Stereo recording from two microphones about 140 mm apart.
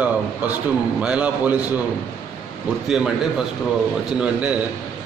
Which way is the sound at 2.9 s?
5° right (ahead or behind).